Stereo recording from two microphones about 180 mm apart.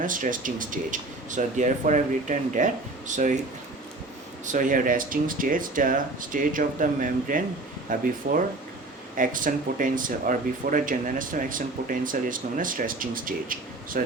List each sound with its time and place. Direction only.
0.0 s speech: 45° right (ahead or behind)
4.4 s speech: 45° right (ahead or behind)